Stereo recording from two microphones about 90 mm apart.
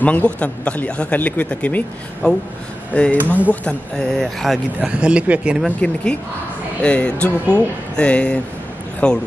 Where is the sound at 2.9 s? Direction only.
15° left (ahead or behind).